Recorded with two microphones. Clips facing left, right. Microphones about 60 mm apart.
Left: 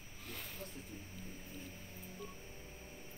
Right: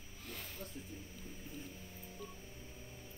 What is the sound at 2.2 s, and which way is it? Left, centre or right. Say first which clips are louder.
Telephone dialing: even; centre.